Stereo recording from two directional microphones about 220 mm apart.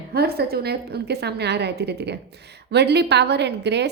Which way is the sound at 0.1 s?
45° right (ahead or behind).